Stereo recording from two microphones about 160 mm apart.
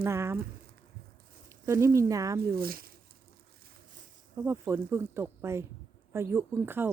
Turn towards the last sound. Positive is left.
turn(degrees=-15)  # may be behind; listen again after turning